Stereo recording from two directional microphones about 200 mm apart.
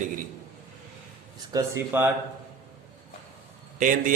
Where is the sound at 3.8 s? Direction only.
40° right (ahead or behind).